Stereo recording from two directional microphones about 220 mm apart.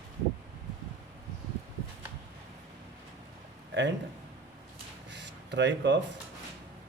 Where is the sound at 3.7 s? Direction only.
55° right (ahead or behind).